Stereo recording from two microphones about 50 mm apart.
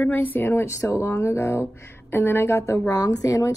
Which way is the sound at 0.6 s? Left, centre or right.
Left.